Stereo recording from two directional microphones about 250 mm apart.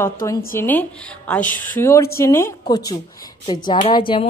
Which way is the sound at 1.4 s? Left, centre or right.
Left.